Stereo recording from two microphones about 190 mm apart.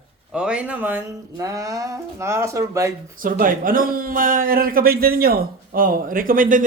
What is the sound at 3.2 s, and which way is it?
A man's voice, 45° right (ahead or behind).